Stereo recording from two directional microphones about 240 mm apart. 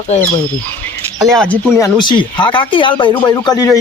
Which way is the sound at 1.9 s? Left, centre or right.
Centre.